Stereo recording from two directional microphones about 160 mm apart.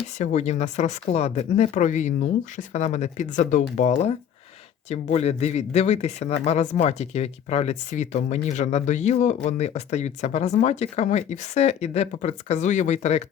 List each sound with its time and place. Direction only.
0.2 s speech: 45° left (ahead or behind)